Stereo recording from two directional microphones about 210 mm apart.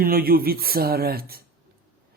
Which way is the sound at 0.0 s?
45° right (ahead or behind).